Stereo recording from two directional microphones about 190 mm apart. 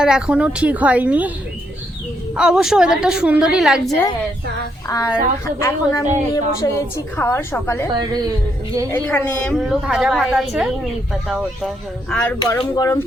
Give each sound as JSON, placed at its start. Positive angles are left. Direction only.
{"t": 0.0, "sound": "speech", "side_deg": -5}
{"t": 2.3, "sound": "a woman's voice", "side_deg": -5}
{"t": 4.9, "sound": "a woman's voice", "side_deg": 20}
{"t": 7.9, "sound": "a woman's voice", "side_deg": -20}
{"t": 8.9, "sound": "a woman's voice", "side_deg": 10}
{"t": 12.1, "sound": "a woman's voice", "side_deg": 5}
{"t": 12.4, "sound": "a woman's voice", "side_deg": 20}